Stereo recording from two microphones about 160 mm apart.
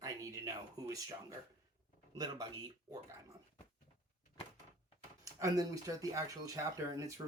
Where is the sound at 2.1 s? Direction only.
25° right (ahead or behind).